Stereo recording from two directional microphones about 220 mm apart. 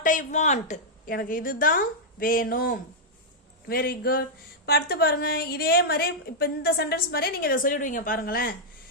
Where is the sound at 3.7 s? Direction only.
45° left (ahead or behind).